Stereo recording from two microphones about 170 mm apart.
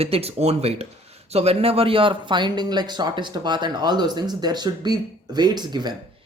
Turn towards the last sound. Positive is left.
turn(degrees=-25)  # may be behind; listen again after turning